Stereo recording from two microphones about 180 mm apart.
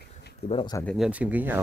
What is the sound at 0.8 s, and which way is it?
Speech, centre (ahead or behind).